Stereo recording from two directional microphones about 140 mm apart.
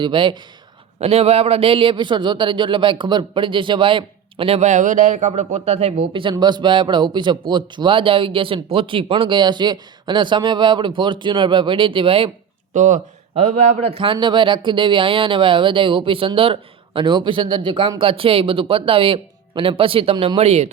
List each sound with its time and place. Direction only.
0.0 s speech: 35° right (ahead or behind)
1.0 s speech: 45° right (ahead or behind); by 5.3 s 65° right (ahead or behind)
5.3 s speech: 50° right (ahead or behind)
12.7 s speech: 65° right (ahead or behind)
14.0 s speech: 35° right (ahead or behind)